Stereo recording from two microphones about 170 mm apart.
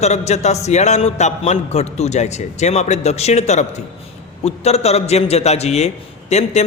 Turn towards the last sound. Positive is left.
turn(degrees=40)  # may be behind; listen again after turning